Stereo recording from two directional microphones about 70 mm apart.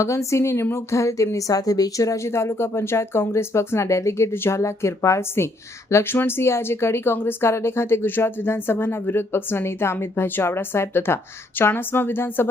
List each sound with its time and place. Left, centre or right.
0.0 s a woman's voice: left